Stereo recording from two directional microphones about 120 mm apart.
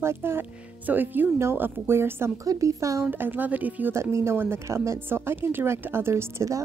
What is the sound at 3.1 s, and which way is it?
Speech, 15° right (ahead or behind).